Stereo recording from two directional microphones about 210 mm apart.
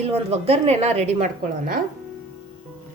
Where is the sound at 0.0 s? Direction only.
30° right (ahead or behind).